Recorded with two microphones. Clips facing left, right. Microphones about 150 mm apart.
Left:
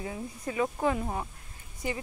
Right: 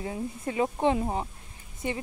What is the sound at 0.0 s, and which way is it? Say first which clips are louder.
A woman's voice: right 3 dB; 30° right (ahead or behind).